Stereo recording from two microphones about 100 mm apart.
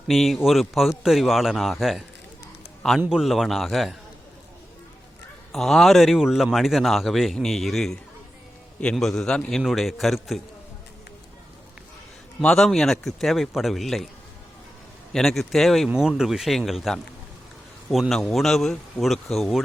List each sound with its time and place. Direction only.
0.1 s a man's voice: centre (ahead or behind)
3.1 s a man's voice: 5° right (ahead or behind)
5.5 s a man's voice: 5° left (ahead or behind)
12.4 s a man's voice: 5° left (ahead or behind)
15.1 s a man's voice: 5° left (ahead or behind)
18.1 s a man's voice: centre (ahead or behind)